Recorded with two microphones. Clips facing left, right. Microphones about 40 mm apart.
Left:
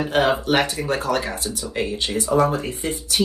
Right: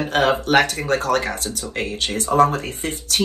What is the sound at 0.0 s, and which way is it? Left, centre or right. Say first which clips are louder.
Speech: right 1 dB; right.